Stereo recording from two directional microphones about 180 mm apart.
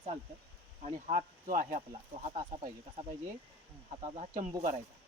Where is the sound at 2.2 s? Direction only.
35° right (ahead or behind).